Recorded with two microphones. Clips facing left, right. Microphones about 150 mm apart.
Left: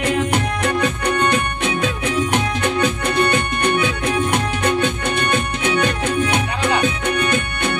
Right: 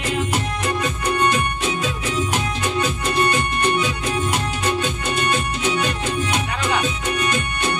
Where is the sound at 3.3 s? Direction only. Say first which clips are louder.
Left 2 dB; 60° left (ahead or behind).